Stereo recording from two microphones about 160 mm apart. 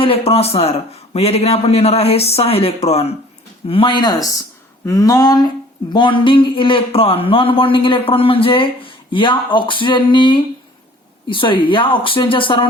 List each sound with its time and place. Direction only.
0.0 s speech: 35° left (ahead or behind)